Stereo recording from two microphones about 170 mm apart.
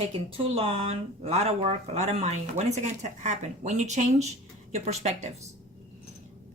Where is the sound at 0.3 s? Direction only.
35° right (ahead or behind).